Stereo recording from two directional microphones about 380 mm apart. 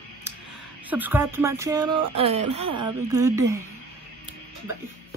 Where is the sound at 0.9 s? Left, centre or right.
Centre.